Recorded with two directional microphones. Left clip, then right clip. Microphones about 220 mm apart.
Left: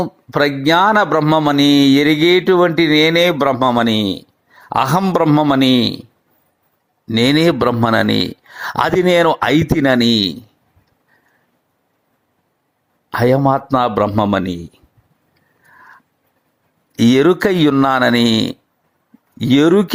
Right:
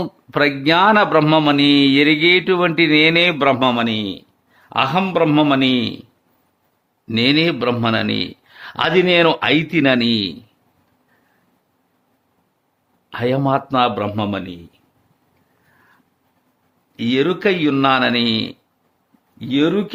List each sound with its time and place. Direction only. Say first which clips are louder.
0.3 s speech: left 1 dB; 20° left (ahead or behind)
1.2 s mantra: left 1 dB; 10° left (ahead or behind)
1.5 s speech: left 2 dB; 25° left (ahead or behind)
7.1 s a man's voice: left 3 dB; 25° left (ahead or behind)
13.1 s a man's voice: left 5 dB; 25° left (ahead or behind)
17.0 s a man's voice: left 5 dB; 35° left (ahead or behind)